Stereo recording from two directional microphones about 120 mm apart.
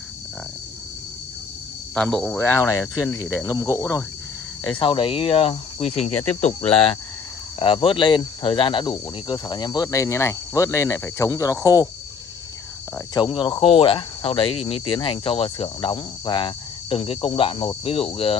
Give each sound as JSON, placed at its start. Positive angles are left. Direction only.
{"t": 2.0, "sound": "speech", "side_deg": 5}
{"t": 4.6, "sound": "speech", "side_deg": 45}
{"t": 13.1, "sound": "speech", "side_deg": 40}